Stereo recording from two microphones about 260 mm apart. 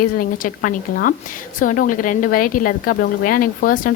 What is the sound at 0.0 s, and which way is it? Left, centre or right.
A woman's voice, left.